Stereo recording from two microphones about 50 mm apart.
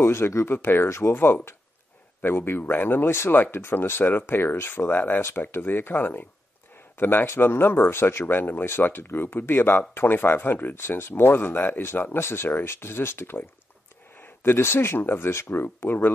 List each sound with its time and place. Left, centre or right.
0.0 s speech: left
0.5 s speech: left
0.8 s speech: left
1.1 s speech: left
4.0 s speech: left
4.8 s a man's voice: left
11.4 s speech: left